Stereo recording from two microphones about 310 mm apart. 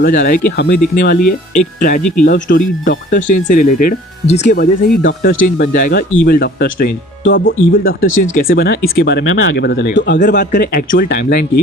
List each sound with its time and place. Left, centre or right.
0.0 s speech: left